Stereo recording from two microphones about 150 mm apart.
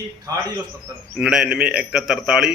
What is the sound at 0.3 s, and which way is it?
Speech, 25° right (ahead or behind).